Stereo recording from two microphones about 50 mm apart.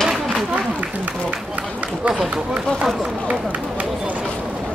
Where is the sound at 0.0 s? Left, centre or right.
Centre.